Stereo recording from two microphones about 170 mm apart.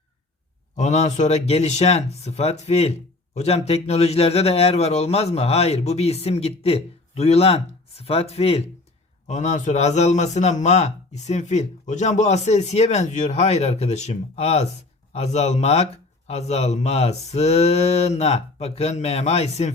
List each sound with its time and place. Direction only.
0.8 s a man's voice: 45° left (ahead or behind)